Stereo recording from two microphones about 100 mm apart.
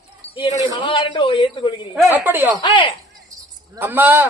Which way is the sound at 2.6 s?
55° left (ahead or behind).